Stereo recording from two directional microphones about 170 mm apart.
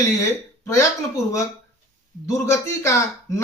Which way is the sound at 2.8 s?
20° left (ahead or behind).